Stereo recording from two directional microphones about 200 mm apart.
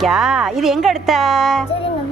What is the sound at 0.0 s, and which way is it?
Speech, centre (ahead or behind).